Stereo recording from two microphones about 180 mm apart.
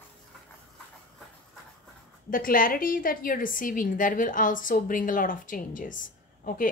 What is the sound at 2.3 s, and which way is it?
A woman's voice, 50° left (ahead or behind).